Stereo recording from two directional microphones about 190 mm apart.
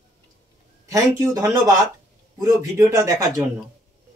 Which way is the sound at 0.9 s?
15° right (ahead or behind).